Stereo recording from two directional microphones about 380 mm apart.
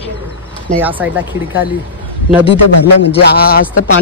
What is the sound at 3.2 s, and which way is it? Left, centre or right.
Speech, left.